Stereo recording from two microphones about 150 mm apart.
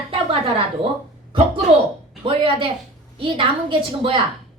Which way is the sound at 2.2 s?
35° right (ahead or behind).